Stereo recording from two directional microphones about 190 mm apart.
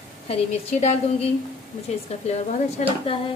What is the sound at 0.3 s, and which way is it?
Speech, 35° left (ahead or behind).